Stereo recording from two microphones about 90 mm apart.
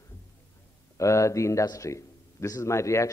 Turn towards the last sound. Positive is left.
turn(degrees=35)  # may be behind; listen again after turning